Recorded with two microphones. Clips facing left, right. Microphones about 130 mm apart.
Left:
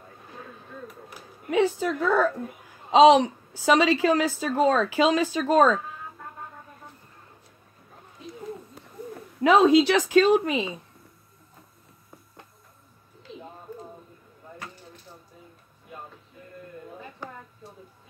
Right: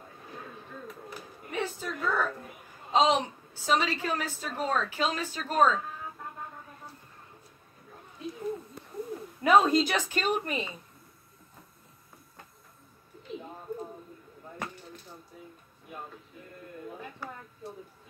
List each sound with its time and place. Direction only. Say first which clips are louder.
1.5 s a woman's voice: left 11 dB; 90° left
9.4 s a woman's voice: left 5 dB; 90° left